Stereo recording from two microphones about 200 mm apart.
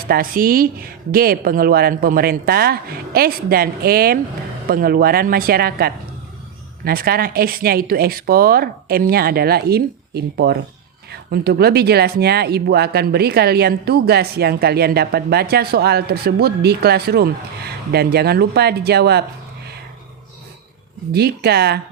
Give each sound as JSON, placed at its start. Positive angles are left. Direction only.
{"t": 0.1, "sound": "speech", "side_deg": -45}
{"t": 21.1, "sound": "speech", "side_deg": -55}